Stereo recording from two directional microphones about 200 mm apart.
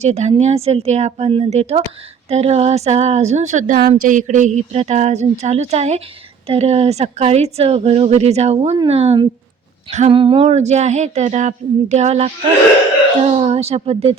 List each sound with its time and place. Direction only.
0.0 s a woman's voice: 35° right (ahead or behind)
13.3 s a woman's voice: 30° right (ahead or behind)